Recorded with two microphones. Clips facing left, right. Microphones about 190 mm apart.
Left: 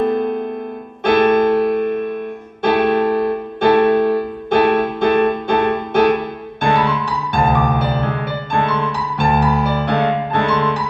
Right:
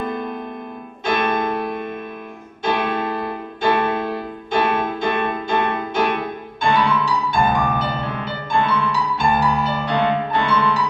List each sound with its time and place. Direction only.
1.0 s music: 60° left (ahead or behind)